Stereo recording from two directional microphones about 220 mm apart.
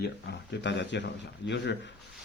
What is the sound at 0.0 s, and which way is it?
Speech, 50° left (ahead or behind).